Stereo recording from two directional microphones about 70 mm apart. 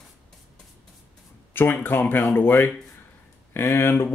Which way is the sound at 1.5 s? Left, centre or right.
Left.